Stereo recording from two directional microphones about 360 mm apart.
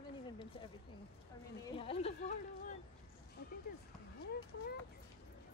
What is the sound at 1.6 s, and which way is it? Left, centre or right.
Speech, centre.